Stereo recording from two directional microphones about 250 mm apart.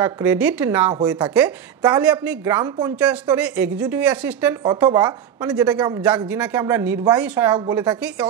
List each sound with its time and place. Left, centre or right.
0.0 s speech: centre
7.9 s speech: centre